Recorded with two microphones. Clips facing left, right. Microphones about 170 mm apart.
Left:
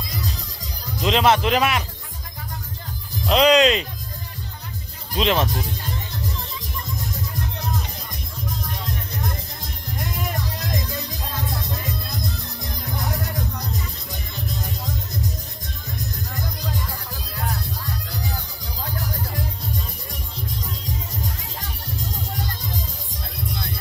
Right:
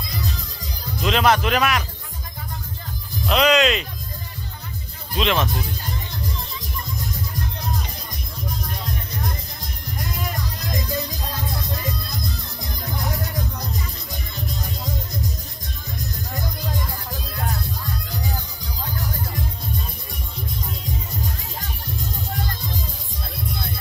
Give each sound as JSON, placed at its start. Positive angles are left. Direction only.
{"t": 1.0, "sound": "speech", "side_deg": 25}
{"t": 3.3, "sound": "speech", "side_deg": 30}
{"t": 5.1, "sound": "speech", "side_deg": 35}